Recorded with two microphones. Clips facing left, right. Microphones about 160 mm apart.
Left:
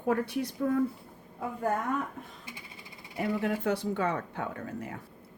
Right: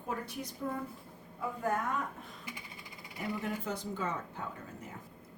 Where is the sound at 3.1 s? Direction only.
70° left (ahead or behind).